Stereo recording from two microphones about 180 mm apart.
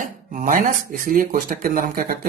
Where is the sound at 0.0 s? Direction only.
50° right (ahead or behind).